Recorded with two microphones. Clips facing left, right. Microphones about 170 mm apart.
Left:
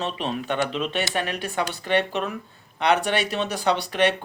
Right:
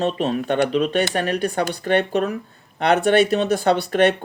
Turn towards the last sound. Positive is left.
turn(degrees=-50)  # may be behind; listen again after turning